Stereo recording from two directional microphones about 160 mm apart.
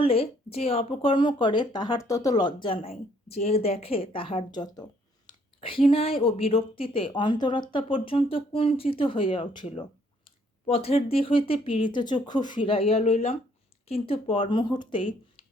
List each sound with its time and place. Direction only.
0.0 s speech: 35° left (ahead or behind)